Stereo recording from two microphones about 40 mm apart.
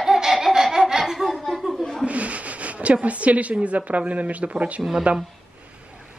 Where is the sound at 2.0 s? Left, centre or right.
Right.